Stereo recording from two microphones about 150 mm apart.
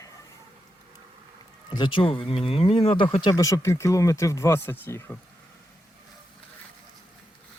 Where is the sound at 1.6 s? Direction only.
30° left (ahead or behind); by 5.1 s 15° left (ahead or behind).